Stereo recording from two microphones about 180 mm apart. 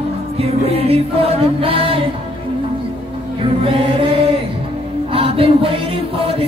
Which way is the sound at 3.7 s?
30° right (ahead or behind).